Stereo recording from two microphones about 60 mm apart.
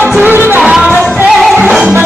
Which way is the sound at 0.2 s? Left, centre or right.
Right.